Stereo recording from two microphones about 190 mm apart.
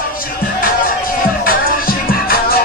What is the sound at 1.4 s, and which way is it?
Music, 50° left (ahead or behind).